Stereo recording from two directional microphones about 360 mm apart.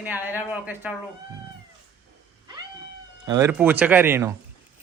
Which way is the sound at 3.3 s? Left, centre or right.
Centre.